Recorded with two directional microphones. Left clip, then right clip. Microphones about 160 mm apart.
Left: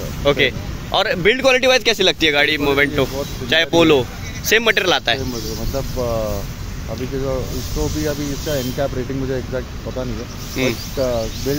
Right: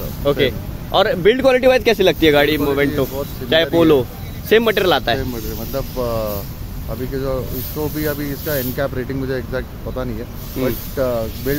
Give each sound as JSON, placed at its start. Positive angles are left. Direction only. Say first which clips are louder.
{"t": 0.2, "sound": "speech", "louder": "left 1 dB", "side_deg": -15}
{"t": 7.8, "sound": "speech", "louder": "even", "side_deg": -10}